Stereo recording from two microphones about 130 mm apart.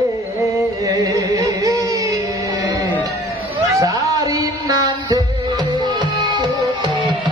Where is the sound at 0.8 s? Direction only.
25° right (ahead or behind).